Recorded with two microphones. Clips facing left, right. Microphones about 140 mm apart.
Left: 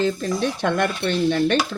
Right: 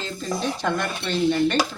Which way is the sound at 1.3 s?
70° left (ahead or behind).